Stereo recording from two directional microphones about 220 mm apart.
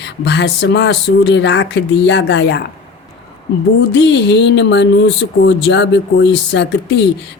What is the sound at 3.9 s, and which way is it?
Speech, 55° left (ahead or behind).